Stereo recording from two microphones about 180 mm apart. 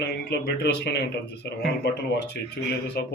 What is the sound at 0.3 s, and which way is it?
Speech, 65° left (ahead or behind).